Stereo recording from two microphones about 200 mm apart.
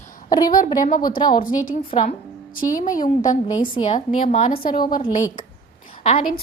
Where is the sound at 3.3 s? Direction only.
20° left (ahead or behind).